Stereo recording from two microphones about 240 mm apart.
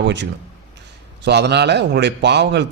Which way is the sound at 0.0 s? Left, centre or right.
Right.